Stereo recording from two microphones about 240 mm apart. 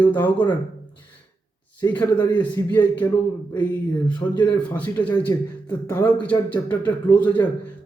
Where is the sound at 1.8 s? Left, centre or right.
Centre.